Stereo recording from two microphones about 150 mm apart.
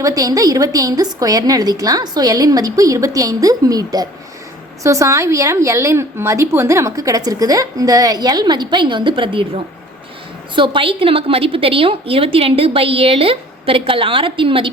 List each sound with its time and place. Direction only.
0.0 s a woman's voice: 25° right (ahead or behind)
10.5 s a woman's voice: 35° right (ahead or behind)